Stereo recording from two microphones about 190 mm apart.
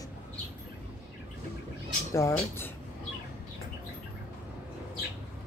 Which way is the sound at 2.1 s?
15° left (ahead or behind).